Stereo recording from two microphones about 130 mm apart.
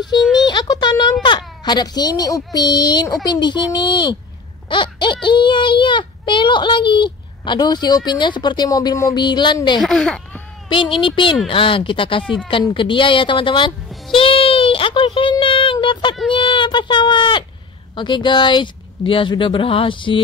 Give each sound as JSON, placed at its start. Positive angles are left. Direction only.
{"t": 0.2, "sound": "a child's voice", "side_deg": 0}
{"t": 0.5, "sound": "a child's voice", "side_deg": 35}
{"t": 9.8, "sound": "speech", "side_deg": 5}
{"t": 10.7, "sound": "a child's voice", "side_deg": 40}